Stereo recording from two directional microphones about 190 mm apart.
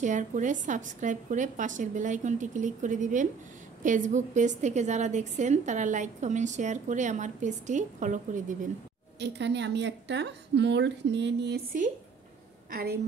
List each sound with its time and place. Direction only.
0.0 s a woman's voice: 40° right (ahead or behind)
9.2 s a woman's voice: 65° right (ahead or behind)